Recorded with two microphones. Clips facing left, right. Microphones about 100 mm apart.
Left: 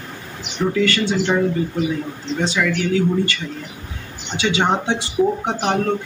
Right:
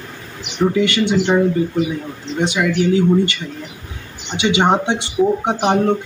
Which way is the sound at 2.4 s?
20° right (ahead or behind).